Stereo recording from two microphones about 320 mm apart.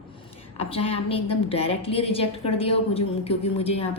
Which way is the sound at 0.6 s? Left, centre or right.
Centre.